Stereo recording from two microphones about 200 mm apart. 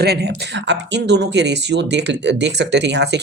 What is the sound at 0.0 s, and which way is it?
Speech, 55° right (ahead or behind).